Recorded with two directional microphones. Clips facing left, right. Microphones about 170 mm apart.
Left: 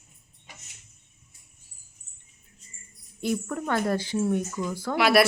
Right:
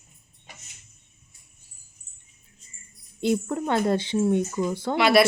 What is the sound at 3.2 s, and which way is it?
A woman's voice, 25° right (ahead or behind).